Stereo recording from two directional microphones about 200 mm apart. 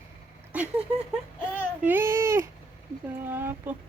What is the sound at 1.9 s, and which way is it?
Speech, 10° right (ahead or behind).